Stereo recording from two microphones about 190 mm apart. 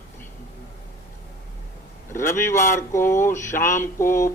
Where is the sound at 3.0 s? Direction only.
45° left (ahead or behind).